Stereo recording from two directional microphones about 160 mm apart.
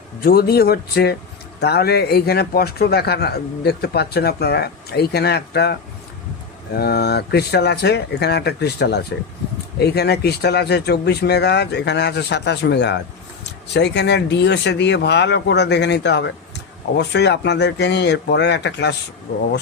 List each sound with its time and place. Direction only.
0.2 s speech: 70° left (ahead or behind); by 5.7 s 90° left
6.7 s speech: 85° left